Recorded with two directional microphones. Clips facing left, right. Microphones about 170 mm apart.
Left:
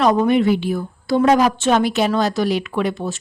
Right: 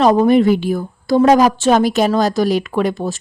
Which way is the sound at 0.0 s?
35° right (ahead or behind).